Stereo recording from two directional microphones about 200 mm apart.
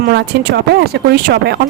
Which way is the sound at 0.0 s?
55° right (ahead or behind).